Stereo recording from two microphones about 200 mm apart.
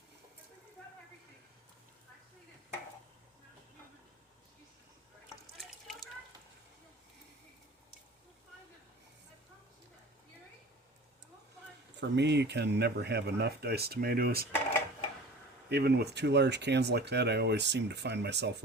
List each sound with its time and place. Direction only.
5.5 s water: centre (ahead or behind)
11.9 s speech: 60° right (ahead or behind)
15.7 s speech: 55° right (ahead or behind)